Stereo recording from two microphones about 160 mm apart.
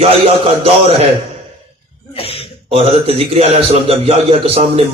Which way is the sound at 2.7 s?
35° right (ahead or behind).